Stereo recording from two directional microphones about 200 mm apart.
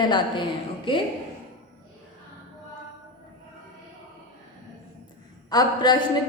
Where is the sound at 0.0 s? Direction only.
20° left (ahead or behind).